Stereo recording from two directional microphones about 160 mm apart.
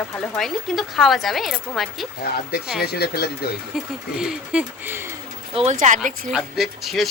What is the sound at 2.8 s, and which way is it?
Speech, 80° left.